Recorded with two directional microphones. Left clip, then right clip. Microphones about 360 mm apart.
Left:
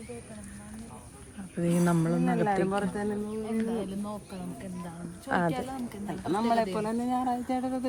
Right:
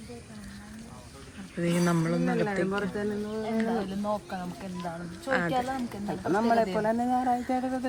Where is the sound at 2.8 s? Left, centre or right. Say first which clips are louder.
Right 1 dB; centre.